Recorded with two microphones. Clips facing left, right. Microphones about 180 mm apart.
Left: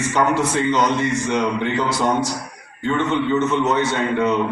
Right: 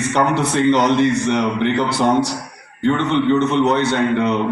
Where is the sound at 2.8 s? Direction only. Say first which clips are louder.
Right 4 dB; 65° right (ahead or behind).